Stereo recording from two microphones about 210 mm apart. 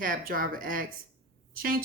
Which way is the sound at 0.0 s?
40° right (ahead or behind).